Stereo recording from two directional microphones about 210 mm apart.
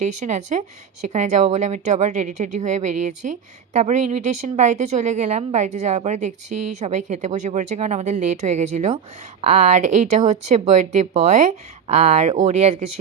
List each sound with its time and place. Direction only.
0.0 s a woman's voice: 35° right (ahead or behind)